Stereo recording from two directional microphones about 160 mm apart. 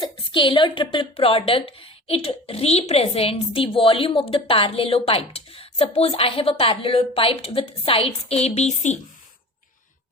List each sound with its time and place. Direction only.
0.0 s a woman's voice: 30° left (ahead or behind); by 9.0 s 45° left (ahead or behind)